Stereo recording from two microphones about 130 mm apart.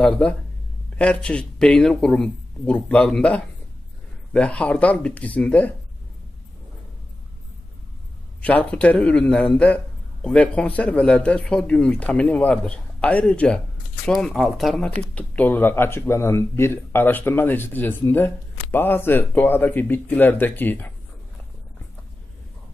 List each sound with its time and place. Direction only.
0.0 s speech: 10° left (ahead or behind)
8.4 s speech: 10° left (ahead or behind)
15.0 s speech: 10° left (ahead or behind)